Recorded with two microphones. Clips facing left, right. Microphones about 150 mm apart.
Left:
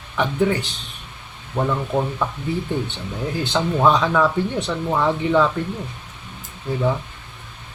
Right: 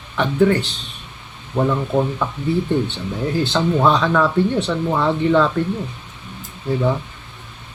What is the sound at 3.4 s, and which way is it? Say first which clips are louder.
Speech: right 1 dB; 10° left (ahead or behind).